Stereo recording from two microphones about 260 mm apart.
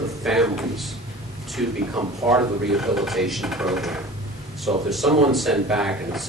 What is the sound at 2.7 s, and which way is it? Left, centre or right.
Speech, centre.